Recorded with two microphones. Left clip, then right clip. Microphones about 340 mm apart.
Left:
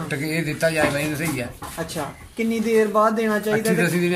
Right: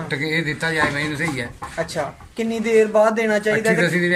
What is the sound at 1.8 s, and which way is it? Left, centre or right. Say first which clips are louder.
Speech: right 4 dB; right.